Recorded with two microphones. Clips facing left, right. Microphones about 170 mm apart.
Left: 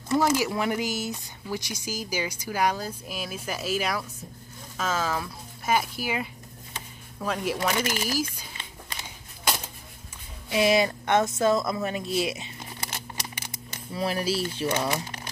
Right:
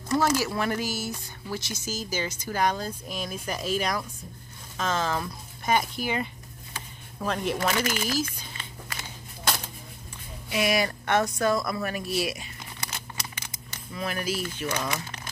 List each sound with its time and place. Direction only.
0.2 s speech: 15° left (ahead or behind)
7.2 s speech: 5° left (ahead or behind)
8.5 s a sound: 20° left (ahead or behind)
10.5 s speech: 25° left (ahead or behind)